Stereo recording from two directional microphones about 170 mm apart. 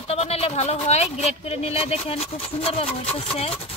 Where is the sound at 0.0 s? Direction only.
35° left (ahead or behind).